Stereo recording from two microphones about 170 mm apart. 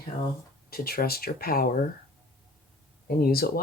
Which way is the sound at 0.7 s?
65° left (ahead or behind).